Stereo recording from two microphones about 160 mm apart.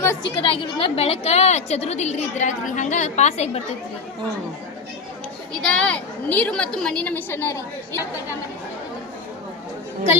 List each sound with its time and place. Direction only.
0.3 s a woman's voice: 35° left (ahead or behind)
5.6 s a woman's voice: 5° left (ahead or behind)